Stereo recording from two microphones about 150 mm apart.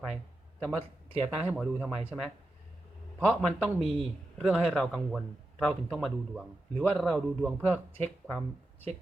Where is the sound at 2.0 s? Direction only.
5° right (ahead or behind).